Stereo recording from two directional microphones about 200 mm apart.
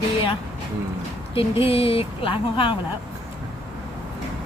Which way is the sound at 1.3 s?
30° left (ahead or behind).